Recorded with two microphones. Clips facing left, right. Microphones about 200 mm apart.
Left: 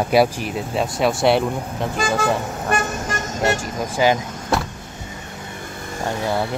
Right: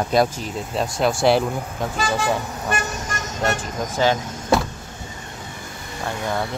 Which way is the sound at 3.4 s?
10° left (ahead or behind).